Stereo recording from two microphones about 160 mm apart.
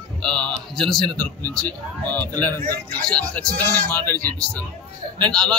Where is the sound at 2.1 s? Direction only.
10° left (ahead or behind).